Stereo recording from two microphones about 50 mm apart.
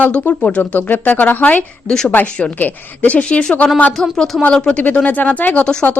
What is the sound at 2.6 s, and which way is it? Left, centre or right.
Speech, left.